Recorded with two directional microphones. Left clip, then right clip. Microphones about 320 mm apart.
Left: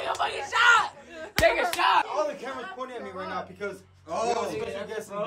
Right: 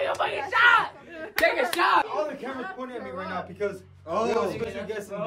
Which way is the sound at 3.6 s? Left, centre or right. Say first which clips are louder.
Right 5 dB; centre.